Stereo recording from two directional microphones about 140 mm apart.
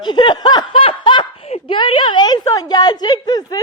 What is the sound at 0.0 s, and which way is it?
Snicker, 35° left (ahead or behind).